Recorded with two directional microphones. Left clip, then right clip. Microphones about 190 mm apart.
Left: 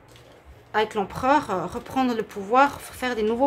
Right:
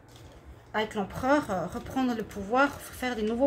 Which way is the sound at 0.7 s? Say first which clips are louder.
Left 7 dB; 30° left (ahead or behind).